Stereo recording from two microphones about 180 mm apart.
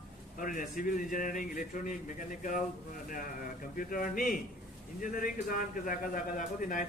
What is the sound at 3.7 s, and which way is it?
A man's voice, 50° left (ahead or behind).